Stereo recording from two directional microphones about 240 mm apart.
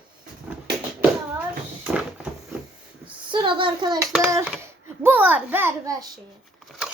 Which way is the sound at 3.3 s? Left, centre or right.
Right.